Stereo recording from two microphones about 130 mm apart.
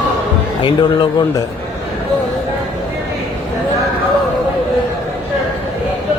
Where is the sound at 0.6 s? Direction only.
40° left (ahead or behind).